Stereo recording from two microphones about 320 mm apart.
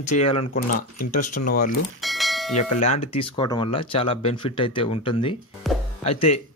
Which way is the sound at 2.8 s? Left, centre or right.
Centre.